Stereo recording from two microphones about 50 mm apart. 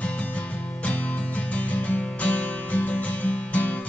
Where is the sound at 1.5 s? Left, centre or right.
Left.